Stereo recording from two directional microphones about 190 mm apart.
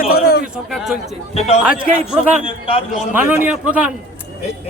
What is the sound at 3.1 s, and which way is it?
Speech, 10° right (ahead or behind).